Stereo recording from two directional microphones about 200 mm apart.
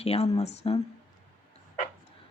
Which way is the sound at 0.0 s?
30° left (ahead or behind).